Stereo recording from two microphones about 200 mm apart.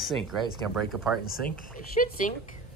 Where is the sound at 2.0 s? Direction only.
35° left (ahead or behind).